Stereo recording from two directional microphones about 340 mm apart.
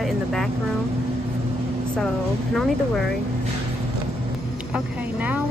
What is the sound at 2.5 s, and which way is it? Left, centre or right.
Speech, centre.